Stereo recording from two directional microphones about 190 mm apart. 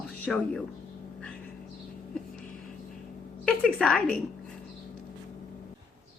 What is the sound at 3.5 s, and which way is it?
Speech, 5° left (ahead or behind).